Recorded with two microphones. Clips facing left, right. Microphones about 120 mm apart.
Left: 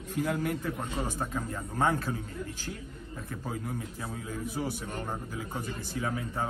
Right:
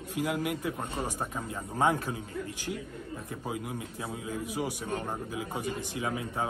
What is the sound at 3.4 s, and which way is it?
A man's voice, 10° right (ahead or behind).